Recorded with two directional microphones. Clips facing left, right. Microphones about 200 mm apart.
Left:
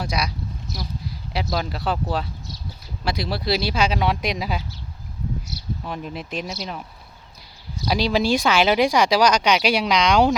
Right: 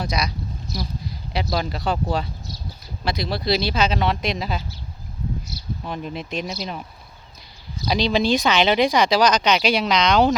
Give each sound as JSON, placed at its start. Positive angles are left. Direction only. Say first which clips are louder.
{"t": 0.0, "sound": "speech", "louder": "right 1 dB", "side_deg": 5}
{"t": 5.8, "sound": "speech", "louder": "right 4 dB", "side_deg": 0}
{"t": 7.9, "sound": "speech", "louder": "even", "side_deg": 5}